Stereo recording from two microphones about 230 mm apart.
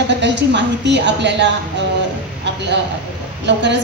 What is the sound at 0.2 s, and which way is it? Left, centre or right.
A woman's voice, right.